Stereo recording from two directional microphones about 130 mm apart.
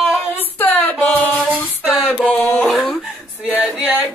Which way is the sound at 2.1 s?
10° left (ahead or behind).